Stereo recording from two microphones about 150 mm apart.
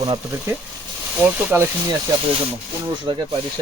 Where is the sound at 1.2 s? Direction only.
10° right (ahead or behind).